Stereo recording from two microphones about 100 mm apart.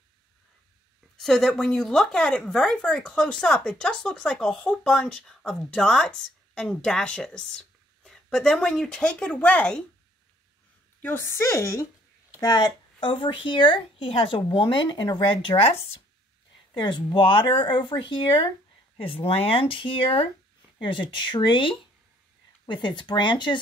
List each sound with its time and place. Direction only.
1.1 s a woman's voice: 5° left (ahead or behind)
11.0 s a woman's voice: 20° left (ahead or behind)
12.4 s speech: 40° left (ahead or behind)
13.1 s speech: 60° left (ahead or behind)
16.7 s speech: 50° left (ahead or behind)
18.9 s speech: 65° left (ahead or behind); by 23.6 s 50° left (ahead or behind)